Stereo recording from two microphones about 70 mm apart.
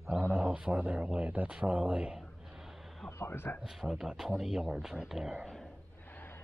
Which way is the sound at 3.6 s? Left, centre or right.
Centre.